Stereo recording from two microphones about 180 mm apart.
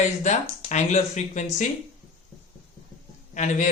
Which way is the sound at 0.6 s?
40° left (ahead or behind).